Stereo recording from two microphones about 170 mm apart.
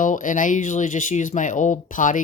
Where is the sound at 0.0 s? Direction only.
50° left (ahead or behind).